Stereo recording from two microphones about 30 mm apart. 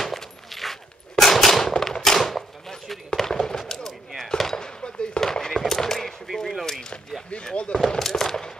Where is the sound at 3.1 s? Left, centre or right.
Centre.